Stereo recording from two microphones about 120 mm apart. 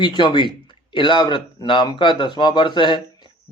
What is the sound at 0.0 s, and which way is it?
Speech, 40° left (ahead or behind).